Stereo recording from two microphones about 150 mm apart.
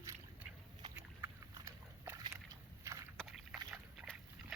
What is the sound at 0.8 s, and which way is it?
Dog, 30° right (ahead or behind).